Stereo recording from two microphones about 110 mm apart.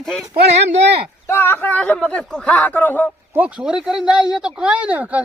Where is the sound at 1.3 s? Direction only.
20° left (ahead or behind).